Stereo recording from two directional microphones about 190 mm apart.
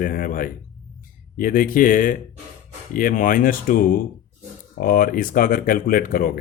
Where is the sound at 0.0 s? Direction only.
45° left (ahead or behind).